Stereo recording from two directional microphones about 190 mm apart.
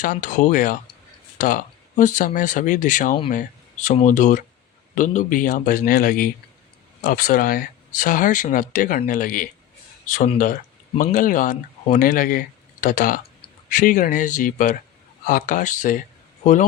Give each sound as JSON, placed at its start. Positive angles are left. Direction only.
{"t": 0.0, "sound": "speech", "side_deg": 40}